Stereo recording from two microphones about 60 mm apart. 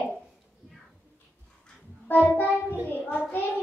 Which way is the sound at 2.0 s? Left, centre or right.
Left.